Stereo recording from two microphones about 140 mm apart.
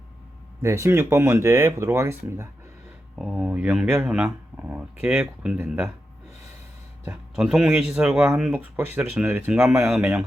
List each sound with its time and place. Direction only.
0.6 s speech: 20° right (ahead or behind)
3.2 s speech: 5° right (ahead or behind)
7.3 s speech: 5° right (ahead or behind)